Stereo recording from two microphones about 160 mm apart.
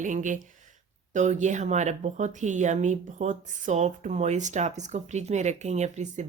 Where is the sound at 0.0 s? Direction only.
50° right (ahead or behind).